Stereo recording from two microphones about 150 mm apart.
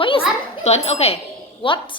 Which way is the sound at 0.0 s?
35° left (ahead or behind).